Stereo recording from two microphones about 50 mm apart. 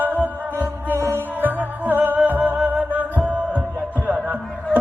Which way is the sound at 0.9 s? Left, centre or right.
Right.